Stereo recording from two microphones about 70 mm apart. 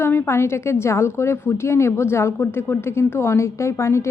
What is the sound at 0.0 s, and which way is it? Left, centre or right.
Speech, left.